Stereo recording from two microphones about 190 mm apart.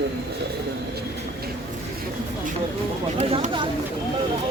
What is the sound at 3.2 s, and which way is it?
Speech, 30° right (ahead or behind).